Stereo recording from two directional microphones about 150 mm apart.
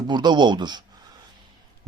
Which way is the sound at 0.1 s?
30° right (ahead or behind).